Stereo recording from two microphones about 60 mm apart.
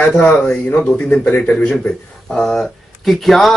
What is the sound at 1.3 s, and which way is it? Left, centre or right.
A man's voice, left.